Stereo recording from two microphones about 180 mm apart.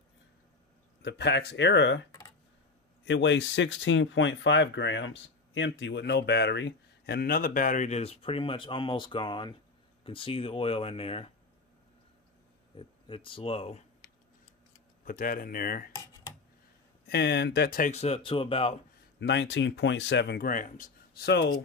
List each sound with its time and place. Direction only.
1.0 s speech: 70° left (ahead or behind)
3.1 s speech: 80° left; by 11.3 s 35° left (ahead or behind)
12.7 s speech: 30° left (ahead or behind)
15.0 s speech: 50° left (ahead or behind)
15.9 s a sound: 20° left (ahead or behind)
17.1 s speech: 65° left (ahead or behind); by 18.8 s 30° left (ahead or behind)
19.1 s speech: 75° left (ahead or behind)